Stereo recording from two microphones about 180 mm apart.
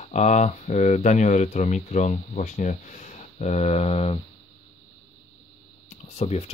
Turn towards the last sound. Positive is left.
turn(degrees=35)  # may be behind; listen again after turning